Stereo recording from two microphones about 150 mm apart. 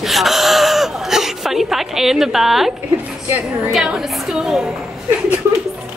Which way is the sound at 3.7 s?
5° right (ahead or behind).